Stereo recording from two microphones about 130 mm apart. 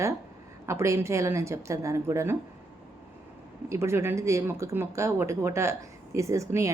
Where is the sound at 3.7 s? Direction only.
20° right (ahead or behind).